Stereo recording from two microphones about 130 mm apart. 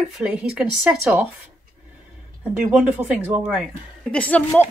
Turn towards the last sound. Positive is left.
turn(degrees=10)  # may be behind; listen again after turning